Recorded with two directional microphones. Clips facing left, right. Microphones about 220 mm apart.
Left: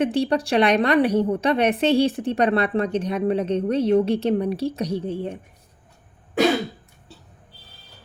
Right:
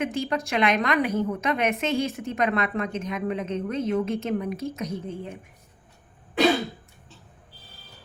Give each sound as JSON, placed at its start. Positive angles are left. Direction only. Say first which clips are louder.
{"t": 0.0, "sound": "a woman's voice", "louder": "left 6 dB", "side_deg": 35}